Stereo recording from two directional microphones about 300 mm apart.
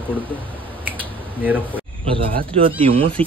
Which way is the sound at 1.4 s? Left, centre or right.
Centre.